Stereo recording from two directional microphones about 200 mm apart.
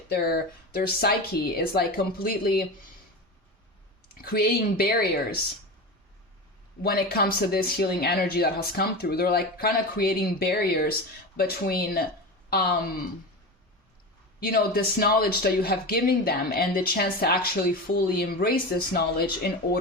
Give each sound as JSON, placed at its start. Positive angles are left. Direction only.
{"t": 0.1, "sound": "speech", "side_deg": 50}
{"t": 4.2, "sound": "speech", "side_deg": 50}
{"t": 6.8, "sound": "speech", "side_deg": 50}
{"t": 14.4, "sound": "speech", "side_deg": 50}